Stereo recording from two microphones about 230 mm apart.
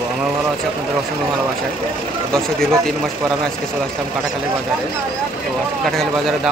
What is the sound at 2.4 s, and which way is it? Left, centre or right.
Speech, centre.